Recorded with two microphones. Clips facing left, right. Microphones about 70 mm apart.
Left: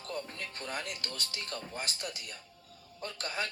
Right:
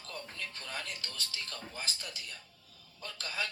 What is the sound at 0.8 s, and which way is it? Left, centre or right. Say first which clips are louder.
Speech: left 2 dB; left.